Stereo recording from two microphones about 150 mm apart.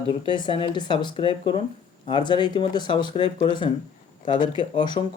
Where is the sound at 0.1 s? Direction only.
30° left (ahead or behind).